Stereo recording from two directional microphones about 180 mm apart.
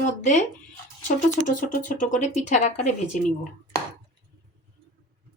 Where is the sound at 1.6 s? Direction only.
45° left (ahead or behind).